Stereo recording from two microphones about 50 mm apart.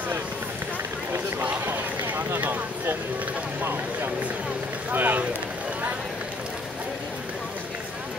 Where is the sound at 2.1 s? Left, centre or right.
Right.